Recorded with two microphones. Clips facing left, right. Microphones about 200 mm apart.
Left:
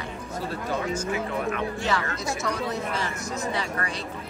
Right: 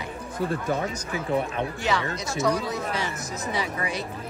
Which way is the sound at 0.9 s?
35° right (ahead or behind).